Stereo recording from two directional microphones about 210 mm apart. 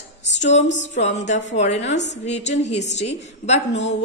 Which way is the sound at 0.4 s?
35° left (ahead or behind).